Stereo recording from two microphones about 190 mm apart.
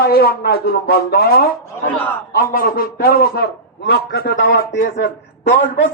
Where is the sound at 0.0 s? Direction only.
55° left (ahead or behind).